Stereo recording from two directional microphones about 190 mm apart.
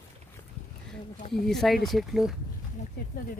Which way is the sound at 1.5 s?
Centre (ahead or behind).